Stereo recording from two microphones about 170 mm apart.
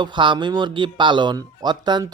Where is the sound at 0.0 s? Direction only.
30° right (ahead or behind).